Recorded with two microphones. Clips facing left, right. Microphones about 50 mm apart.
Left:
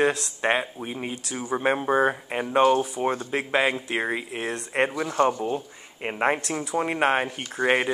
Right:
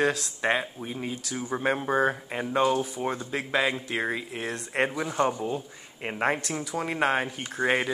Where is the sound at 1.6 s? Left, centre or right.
Centre.